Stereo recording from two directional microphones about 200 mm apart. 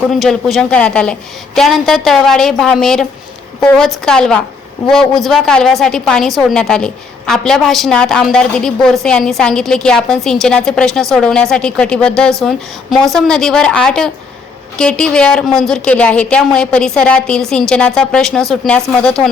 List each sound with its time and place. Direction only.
0.1 s a woman's voice: centre (ahead or behind)